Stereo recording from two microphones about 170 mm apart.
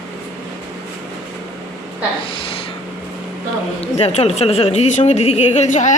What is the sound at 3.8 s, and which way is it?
A woman's voice, 35° left (ahead or behind).